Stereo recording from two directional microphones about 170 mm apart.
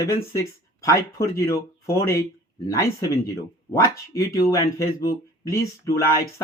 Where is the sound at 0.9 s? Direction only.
20° left (ahead or behind).